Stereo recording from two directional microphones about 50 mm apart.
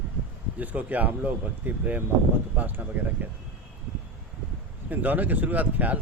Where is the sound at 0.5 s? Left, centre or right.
Right.